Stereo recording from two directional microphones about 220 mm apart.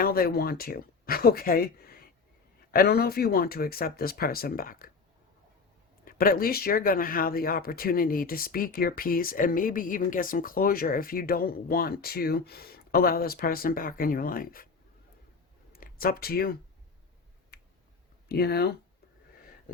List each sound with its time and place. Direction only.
0.0 s speech: 45° left (ahead or behind)
6.1 s speech: 40° left (ahead or behind)
15.7 s speech: 40° left (ahead or behind)
17.5 s a sound: 45° left (ahead or behind)
18.3 s speech: 45° left (ahead or behind)